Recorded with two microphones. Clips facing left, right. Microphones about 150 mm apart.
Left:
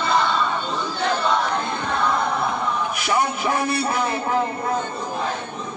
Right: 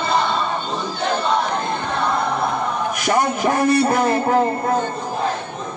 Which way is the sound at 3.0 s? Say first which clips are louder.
Right 4 dB; 45° right (ahead or behind).